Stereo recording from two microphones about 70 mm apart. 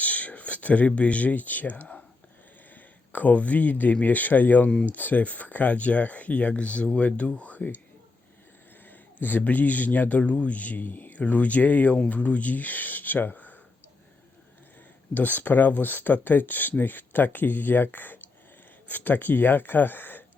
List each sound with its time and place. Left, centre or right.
0.0 s a man's voice: left
4.7 s speech: centre
4.9 s speech: left
9.2 s speech: left
15.1 s speech: left